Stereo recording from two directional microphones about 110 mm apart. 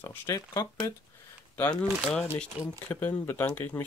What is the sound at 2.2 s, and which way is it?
Speech, 15° left (ahead or behind).